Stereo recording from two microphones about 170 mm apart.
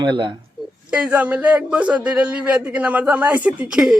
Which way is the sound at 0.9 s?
10° right (ahead or behind).